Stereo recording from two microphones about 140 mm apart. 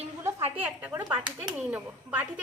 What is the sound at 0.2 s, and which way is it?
A woman's voice, 15° right (ahead or behind).